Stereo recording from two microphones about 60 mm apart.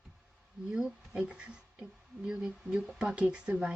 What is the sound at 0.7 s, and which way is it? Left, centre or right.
Speech, centre.